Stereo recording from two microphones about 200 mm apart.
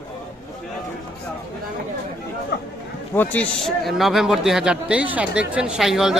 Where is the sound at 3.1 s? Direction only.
5° left (ahead or behind).